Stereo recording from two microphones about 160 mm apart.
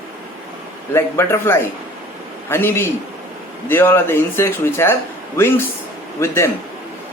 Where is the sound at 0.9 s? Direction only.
15° left (ahead or behind).